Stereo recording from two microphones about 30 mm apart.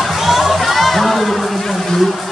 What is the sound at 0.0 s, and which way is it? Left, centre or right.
Music, centre.